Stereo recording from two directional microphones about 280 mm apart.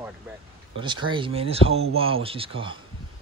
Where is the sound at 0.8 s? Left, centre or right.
Centre.